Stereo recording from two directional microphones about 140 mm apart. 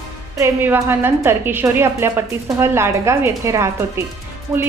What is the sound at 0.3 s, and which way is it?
A woman's voice, 15° right (ahead or behind).